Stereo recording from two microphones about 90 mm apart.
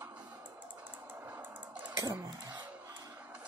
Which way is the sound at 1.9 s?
40° right (ahead or behind).